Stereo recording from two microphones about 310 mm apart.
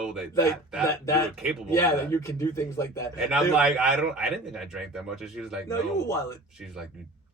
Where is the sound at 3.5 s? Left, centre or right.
Centre.